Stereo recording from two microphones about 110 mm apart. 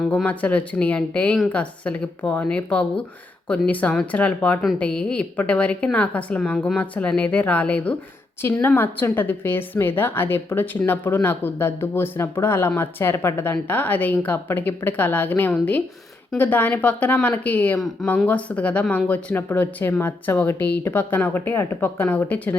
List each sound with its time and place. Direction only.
0.3 s a woman's voice: 10° left (ahead or behind)